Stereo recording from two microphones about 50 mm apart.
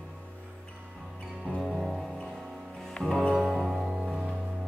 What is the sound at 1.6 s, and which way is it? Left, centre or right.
Music, centre.